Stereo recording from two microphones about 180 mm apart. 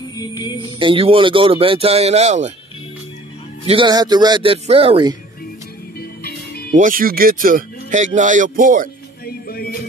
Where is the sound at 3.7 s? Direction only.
25° right (ahead or behind).